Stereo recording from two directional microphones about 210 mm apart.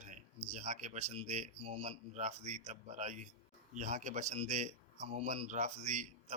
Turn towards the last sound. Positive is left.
turn(degrees=-35)  # may be behind; listen again after turning